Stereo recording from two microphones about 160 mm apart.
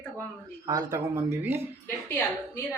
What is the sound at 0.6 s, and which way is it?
Speech, 25° right (ahead or behind).